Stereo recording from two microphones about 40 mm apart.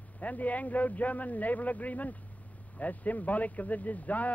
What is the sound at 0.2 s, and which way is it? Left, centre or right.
Speech, left.